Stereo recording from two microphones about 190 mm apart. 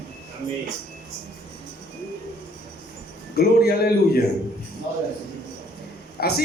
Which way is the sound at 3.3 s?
55° left (ahead or behind).